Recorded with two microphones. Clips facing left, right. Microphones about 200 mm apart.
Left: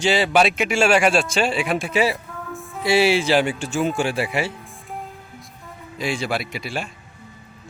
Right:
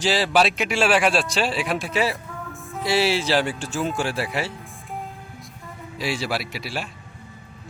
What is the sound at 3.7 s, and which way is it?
Speech, centre (ahead or behind).